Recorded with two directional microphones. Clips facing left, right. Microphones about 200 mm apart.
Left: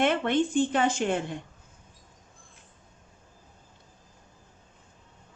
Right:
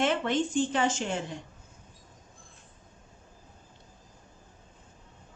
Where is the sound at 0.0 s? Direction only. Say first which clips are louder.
Left 3 dB; 55° left (ahead or behind).